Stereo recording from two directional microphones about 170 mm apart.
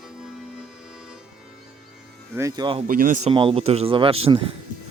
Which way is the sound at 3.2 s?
30° right (ahead or behind).